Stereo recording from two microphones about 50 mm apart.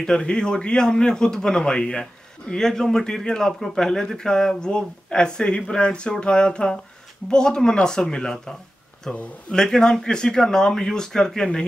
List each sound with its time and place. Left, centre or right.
0.0 s a man's voice: centre